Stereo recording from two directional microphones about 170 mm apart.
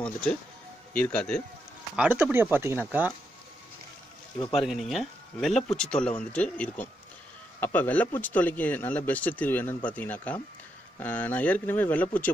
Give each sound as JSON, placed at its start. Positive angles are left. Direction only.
{"t": 0.0, "sound": "speech", "side_deg": 5}
{"t": 2.0, "sound": "speech", "side_deg": -10}
{"t": 4.4, "sound": "speech", "side_deg": 35}
{"t": 4.6, "sound": "speech", "side_deg": 0}